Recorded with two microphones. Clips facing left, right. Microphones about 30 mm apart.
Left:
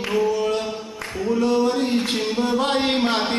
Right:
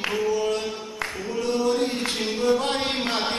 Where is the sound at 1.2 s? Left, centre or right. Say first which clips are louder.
Left 8 dB; left.